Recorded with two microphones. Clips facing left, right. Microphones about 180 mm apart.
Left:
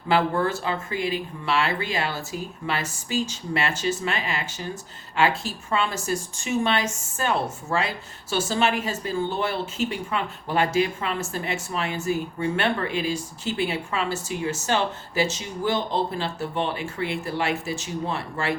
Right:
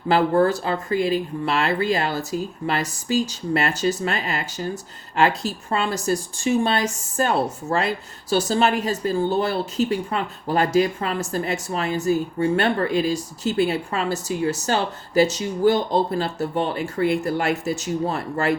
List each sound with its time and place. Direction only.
0.1 s speech: 40° right (ahead or behind)